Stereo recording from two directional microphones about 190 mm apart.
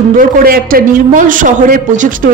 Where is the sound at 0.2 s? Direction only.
50° right (ahead or behind).